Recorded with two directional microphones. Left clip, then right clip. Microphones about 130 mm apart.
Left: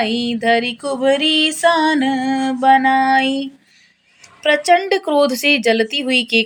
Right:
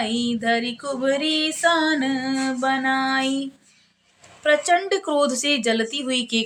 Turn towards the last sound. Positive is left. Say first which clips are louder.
# left 8 dB
turn(degrees=20)  # may be behind; listen again after turning